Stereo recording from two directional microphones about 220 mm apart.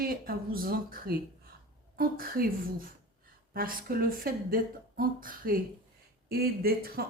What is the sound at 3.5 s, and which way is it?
A woman's voice, 40° right (ahead or behind).